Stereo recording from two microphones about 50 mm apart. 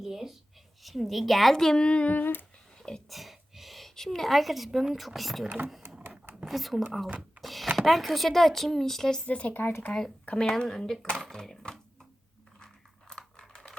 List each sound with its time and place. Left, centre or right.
0.0 s a sound: centre
0.9 s speech: centre; by 2.1 s left
2.1 s humming: left
2.7 s a sound: centre
3.1 s a woman's voice: centre
7.2 s a sound: centre
7.8 s speech: centre
9.2 s speech: left
9.5 s speech: left
10.2 s speech: centre
12.5 s computer keyboard: centre